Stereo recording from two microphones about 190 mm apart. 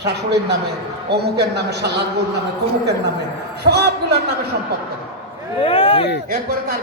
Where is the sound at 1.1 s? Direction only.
60° right (ahead or behind).